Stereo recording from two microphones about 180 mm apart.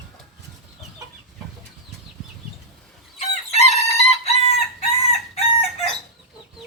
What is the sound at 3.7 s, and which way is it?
Chicken, 35° left (ahead or behind).